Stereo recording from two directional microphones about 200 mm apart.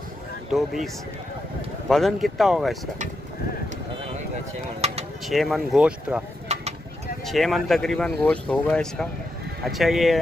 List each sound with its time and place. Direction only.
0.5 s speech: centre (ahead or behind)
1.9 s speech: centre (ahead or behind)
4.8 s bird: 30° right (ahead or behind)
5.3 s speech: centre (ahead or behind)
6.5 s a sound: 35° right (ahead or behind)
7.2 s speech: centre (ahead or behind)